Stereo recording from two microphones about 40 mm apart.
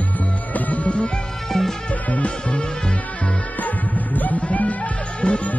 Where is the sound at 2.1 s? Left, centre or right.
Left.